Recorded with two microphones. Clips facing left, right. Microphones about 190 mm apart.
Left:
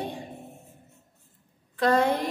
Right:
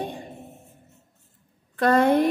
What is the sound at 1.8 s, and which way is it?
Speech, 55° right (ahead or behind).